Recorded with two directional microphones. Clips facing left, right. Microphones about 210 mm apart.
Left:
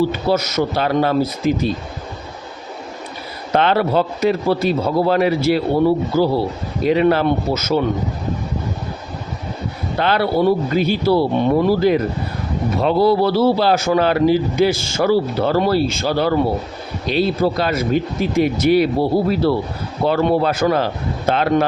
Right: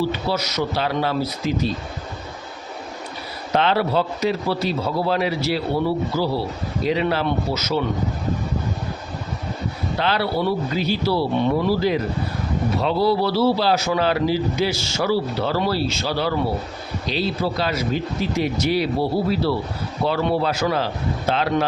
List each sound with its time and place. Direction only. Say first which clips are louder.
0.1 s a man's voice: left 6 dB; 50° left (ahead or behind)
3.5 s a man's voice: left 3 dB; 55° left (ahead or behind)
10.0 s a man's voice: left 6 dB; 50° left (ahead or behind)